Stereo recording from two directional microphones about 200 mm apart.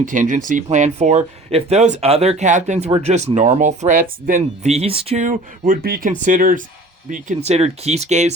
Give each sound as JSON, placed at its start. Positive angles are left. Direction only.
{"t": 0.0, "sound": "speech", "side_deg": -40}